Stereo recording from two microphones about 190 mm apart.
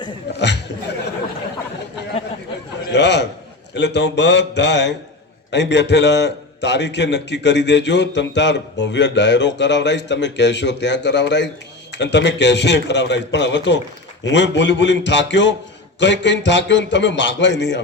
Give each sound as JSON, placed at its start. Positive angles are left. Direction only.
{"t": 0.3, "sound": "speech", "side_deg": 65}
{"t": 2.9, "sound": "a man's voice", "side_deg": 65}